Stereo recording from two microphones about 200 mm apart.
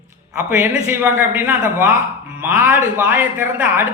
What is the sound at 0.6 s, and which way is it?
Speech, 10° right (ahead or behind).